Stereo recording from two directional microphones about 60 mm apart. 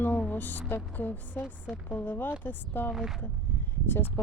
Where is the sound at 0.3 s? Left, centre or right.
Left.